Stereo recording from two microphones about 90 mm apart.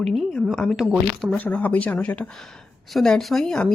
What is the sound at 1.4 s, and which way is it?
Speech, 20° left (ahead or behind).